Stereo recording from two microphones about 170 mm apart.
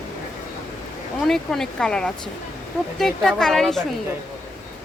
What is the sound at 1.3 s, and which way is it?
Speech, centre (ahead or behind).